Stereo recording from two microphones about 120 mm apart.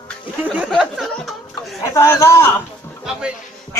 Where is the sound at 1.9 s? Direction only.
25° left (ahead or behind).